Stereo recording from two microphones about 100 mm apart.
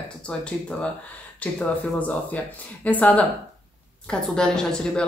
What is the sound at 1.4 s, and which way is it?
Speech, 15° left (ahead or behind).